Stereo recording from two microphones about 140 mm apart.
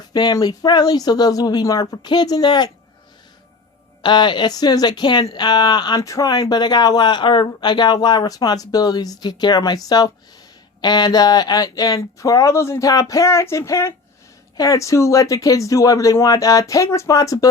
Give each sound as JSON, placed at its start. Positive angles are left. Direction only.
{"t": 0.1, "sound": "speech", "side_deg": 30}
{"t": 4.0, "sound": "speech", "side_deg": 35}